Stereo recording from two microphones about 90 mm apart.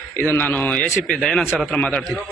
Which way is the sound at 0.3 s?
20° left (ahead or behind).